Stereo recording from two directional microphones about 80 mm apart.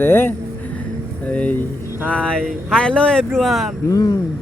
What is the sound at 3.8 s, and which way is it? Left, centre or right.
Speech, left.